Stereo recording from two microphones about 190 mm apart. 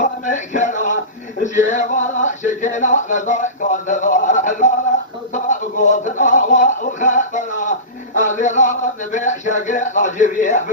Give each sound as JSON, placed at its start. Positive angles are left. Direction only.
{"t": 0.0, "sound": "music", "side_deg": 40}
{"t": 1.4, "sound": "speech", "side_deg": 40}
{"t": 5.3, "sound": "a sound", "side_deg": 40}
{"t": 9.1, "sound": "speech", "side_deg": 40}